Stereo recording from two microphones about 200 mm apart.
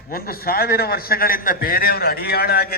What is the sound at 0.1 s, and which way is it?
A man's voice, 50° left (ahead or behind).